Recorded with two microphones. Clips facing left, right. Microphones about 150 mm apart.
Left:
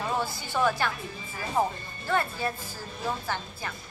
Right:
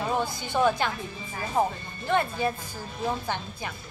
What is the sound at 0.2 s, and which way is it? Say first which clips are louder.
Speech: right 3 dB; 20° right (ahead or behind).